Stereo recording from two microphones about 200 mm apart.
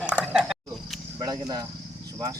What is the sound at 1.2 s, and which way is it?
Cricket, 20° right (ahead or behind).